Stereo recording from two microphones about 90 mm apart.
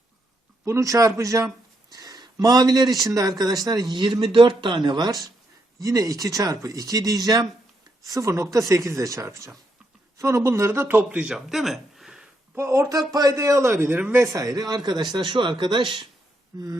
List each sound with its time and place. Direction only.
0.6 s speech: 35° right (ahead or behind)
5.8 s a man's voice: 40° right (ahead or behind)
11.2 s speech: 5° right (ahead or behind)
12.5 s speech: 30° right (ahead or behind)
14.3 s speech: 45° right (ahead or behind); by 16.0 s 65° right (ahead or behind)